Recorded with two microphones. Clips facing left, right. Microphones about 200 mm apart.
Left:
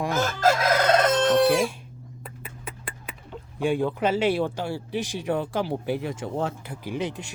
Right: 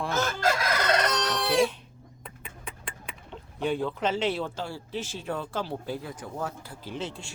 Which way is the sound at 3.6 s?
10° left (ahead or behind).